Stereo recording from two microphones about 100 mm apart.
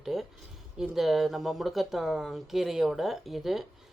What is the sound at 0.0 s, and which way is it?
Speech, 5° right (ahead or behind).